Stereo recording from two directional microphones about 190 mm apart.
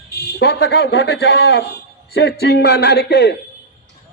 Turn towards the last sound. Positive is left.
turn(degrees=60)  # may be behind; listen again after turning